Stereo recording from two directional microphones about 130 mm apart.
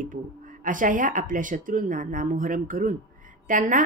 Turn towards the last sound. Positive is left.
turn(degrees=-90)